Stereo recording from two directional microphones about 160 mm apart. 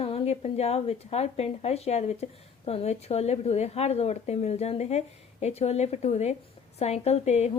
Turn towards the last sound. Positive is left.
turn(degrees=45)  # may be behind; listen again after turning